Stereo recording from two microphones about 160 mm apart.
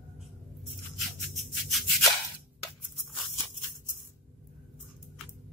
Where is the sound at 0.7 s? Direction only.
Centre (ahead or behind).